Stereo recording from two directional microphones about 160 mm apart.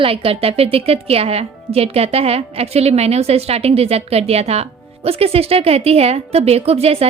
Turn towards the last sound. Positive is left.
turn(degrees=-40)  # may be behind; listen again after turning